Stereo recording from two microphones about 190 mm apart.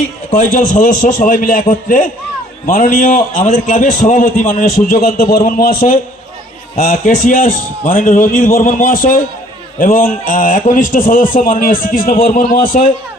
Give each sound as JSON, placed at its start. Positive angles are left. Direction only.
{"t": 0.3, "sound": "a man's voice", "side_deg": 45}